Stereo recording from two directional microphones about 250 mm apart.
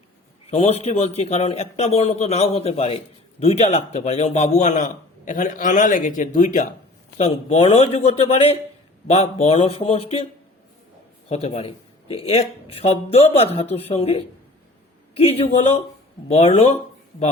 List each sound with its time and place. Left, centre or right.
0.5 s a man's voice: left
11.4 s a man's voice: left